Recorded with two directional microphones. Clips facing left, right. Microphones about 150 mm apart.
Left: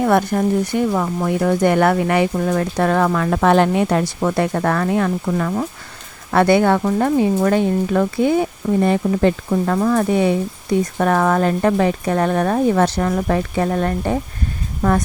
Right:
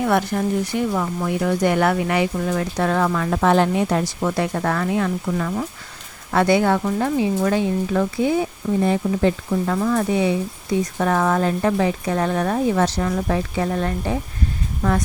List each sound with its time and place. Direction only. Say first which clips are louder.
0.0 s speech: left 4 dB; 50° left (ahead or behind)